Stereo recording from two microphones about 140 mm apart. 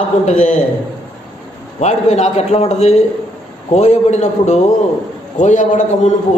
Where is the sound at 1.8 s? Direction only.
55° left (ahead or behind).